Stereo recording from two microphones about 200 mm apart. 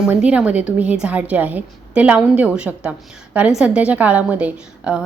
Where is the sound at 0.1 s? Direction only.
5° right (ahead or behind).